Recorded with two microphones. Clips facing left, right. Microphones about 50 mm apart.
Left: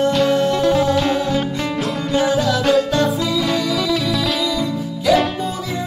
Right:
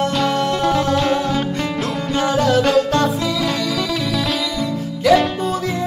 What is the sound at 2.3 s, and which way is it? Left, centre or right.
Music, right.